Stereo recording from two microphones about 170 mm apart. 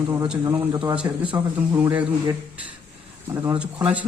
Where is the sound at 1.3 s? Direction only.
15° right (ahead or behind).